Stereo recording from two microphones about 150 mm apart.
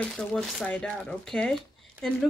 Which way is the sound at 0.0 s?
5° left (ahead or behind).